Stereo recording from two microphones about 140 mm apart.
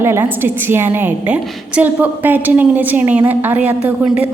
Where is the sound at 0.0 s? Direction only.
15° right (ahead or behind).